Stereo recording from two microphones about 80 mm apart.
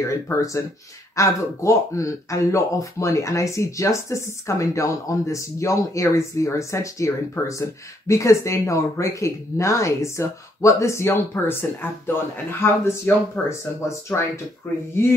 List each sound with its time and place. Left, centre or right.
0.0 s speech: left